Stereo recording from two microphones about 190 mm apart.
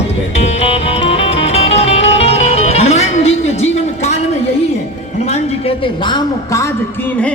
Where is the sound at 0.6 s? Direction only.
30° left (ahead or behind).